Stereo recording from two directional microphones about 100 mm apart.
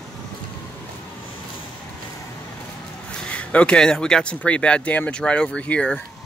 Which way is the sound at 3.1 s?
10° left (ahead or behind).